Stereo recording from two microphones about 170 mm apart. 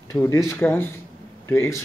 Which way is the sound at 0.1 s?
20° left (ahead or behind).